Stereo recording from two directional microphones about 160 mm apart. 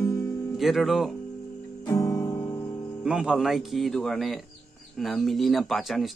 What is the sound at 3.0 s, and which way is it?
A man's voice, 5° right (ahead or behind).